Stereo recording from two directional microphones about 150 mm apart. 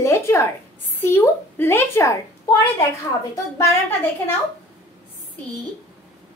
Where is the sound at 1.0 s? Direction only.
15° left (ahead or behind).